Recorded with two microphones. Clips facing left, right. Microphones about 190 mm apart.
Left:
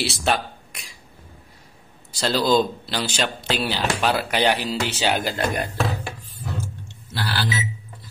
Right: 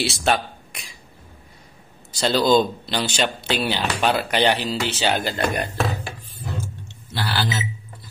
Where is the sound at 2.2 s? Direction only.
5° left (ahead or behind).